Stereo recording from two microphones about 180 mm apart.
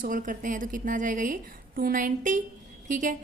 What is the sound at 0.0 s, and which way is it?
A woman's voice, 45° right (ahead or behind).